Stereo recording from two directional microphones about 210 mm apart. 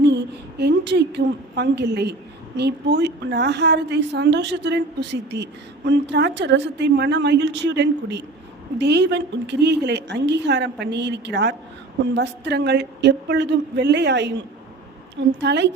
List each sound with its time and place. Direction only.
0.0 s a woman's voice: 55° right (ahead or behind)